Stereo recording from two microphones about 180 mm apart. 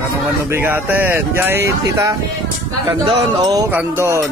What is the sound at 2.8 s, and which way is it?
Speech, 30° right (ahead or behind).